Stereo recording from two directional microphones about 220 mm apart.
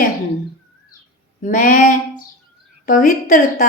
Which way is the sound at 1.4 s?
35° left (ahead or behind).